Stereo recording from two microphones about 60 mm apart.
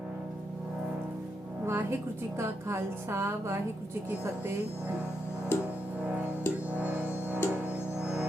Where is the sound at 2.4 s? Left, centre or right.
Right.